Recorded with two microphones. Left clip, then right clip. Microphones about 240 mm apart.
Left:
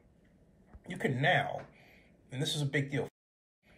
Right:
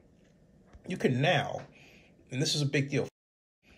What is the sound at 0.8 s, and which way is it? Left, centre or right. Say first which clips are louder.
Speech: right 3 dB; right.